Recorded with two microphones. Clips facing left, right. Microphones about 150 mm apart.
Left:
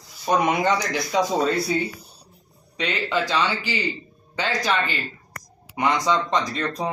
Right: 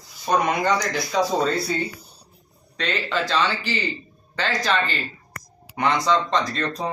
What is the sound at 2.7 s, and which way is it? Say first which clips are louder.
Speech: left 1 dB; 15° left (ahead or behind).